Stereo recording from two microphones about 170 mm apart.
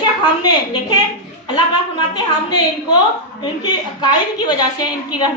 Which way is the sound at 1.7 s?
25° left (ahead or behind).